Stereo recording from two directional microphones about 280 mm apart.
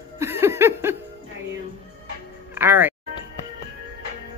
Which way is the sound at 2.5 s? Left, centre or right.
Centre.